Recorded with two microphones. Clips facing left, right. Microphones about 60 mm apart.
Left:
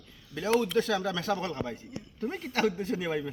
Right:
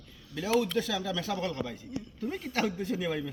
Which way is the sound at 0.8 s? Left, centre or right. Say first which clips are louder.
Left 3 dB; left.